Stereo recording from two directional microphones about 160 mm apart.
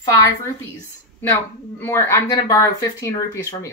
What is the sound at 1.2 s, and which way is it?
Speech, 10° left (ahead or behind).